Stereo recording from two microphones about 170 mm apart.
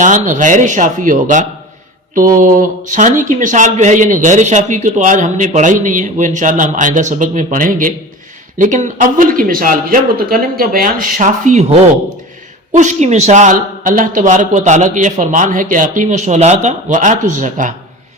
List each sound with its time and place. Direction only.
0.0 s a man's voice: 50° right (ahead or behind)